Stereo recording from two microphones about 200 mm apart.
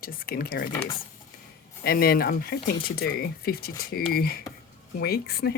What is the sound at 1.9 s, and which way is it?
Speech, 50° left (ahead or behind).